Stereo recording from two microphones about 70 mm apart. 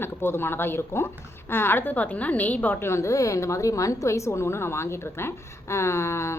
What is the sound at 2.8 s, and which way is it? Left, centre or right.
Speech, left.